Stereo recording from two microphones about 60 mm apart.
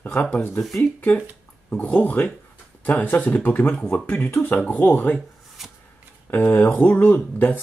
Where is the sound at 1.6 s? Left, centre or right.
Left.